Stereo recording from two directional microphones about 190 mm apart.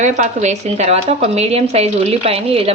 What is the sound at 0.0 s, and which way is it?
Speech, 40° right (ahead or behind).